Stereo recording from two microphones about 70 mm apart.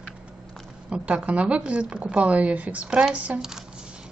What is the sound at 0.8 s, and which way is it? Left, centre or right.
A woman's voice, centre.